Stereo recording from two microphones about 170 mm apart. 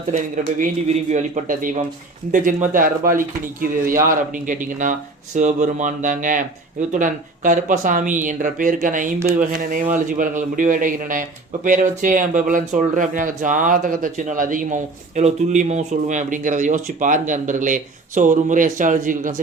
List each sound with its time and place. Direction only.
1.1 s a man's voice: 50° right (ahead or behind)